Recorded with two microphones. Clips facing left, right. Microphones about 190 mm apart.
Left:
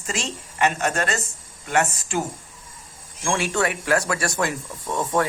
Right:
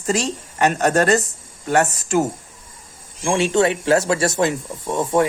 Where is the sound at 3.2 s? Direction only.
20° right (ahead or behind).